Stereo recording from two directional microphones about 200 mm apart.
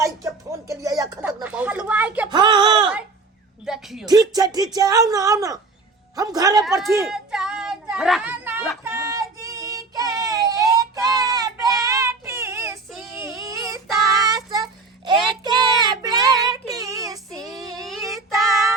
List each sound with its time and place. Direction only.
0.0 s speech: 15° right (ahead or behind)
1.2 s speech: 5° right (ahead or behind)
2.3 s speech: 25° right (ahead or behind)
3.7 s a woman's voice: 5° right (ahead or behind)
4.0 s speech: 20° right (ahead or behind)
7.1 s child singing: 5° right (ahead or behind)
12.9 s child singing: centre (ahead or behind)
13.1 s child singing: 15° right (ahead or behind)
17.4 s child singing: centre (ahead or behind)